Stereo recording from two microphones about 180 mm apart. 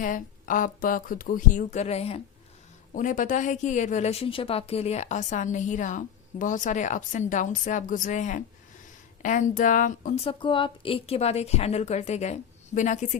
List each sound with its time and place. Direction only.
0.0 s a woman's voice: 50° left (ahead or behind)
2.9 s a woman's voice: 45° left (ahead or behind)
10.2 s a woman's voice: 30° left (ahead or behind)